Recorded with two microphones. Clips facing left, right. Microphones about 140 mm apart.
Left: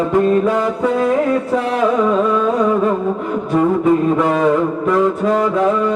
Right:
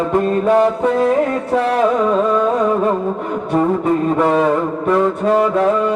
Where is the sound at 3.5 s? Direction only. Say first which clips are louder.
Left 2 dB; 30° right (ahead or behind).